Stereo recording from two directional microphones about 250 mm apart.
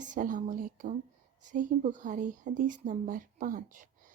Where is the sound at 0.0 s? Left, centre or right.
Right.